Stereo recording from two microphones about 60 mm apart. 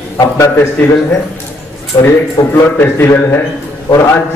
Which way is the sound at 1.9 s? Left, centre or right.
Left.